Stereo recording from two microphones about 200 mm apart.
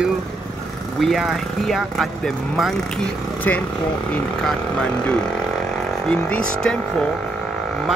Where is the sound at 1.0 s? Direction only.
Centre (ahead or behind).